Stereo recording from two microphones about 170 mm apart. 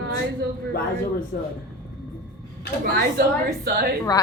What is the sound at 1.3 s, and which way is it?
Speech, 75° left (ahead or behind).